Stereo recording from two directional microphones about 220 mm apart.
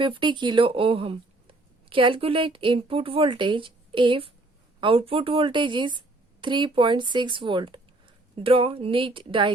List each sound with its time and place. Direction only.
0.0 s a woman's voice: 20° right (ahead or behind)